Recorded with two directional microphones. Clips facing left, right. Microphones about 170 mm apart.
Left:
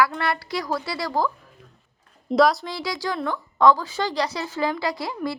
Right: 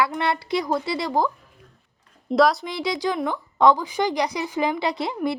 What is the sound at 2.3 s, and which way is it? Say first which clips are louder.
Speech: even; centre (ahead or behind).